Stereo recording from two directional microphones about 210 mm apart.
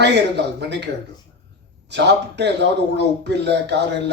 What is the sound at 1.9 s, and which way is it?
A man's voice, 55° right (ahead or behind).